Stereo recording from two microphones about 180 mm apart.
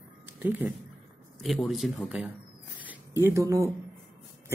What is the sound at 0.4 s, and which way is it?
A man's voice, 10° right (ahead or behind).